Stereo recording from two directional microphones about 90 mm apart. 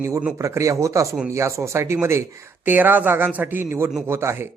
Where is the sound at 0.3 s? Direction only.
35° right (ahead or behind).